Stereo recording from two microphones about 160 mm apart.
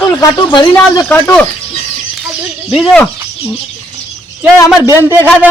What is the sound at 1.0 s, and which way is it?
Speech, 10° left (ahead or behind).